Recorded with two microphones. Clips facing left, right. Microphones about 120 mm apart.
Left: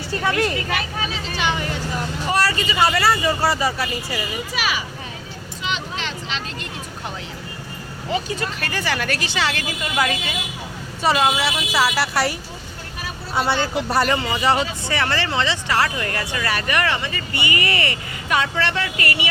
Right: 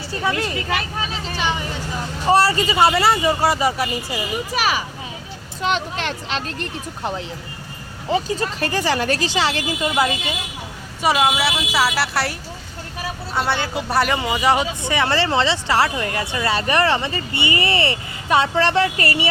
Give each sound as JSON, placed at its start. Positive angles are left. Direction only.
{"t": 0.3, "sound": "speech", "side_deg": -25}
{"t": 2.2, "sound": "speech", "side_deg": -30}
{"t": 4.5, "sound": "a child's voice", "side_deg": -40}
{"t": 5.6, "sound": "speech", "side_deg": -50}
{"t": 8.1, "sound": "speech", "side_deg": -30}
{"t": 11.0, "sound": "speech", "side_deg": -10}
{"t": 13.7, "sound": "speech", "side_deg": 0}
{"t": 14.2, "sound": "speech", "side_deg": -10}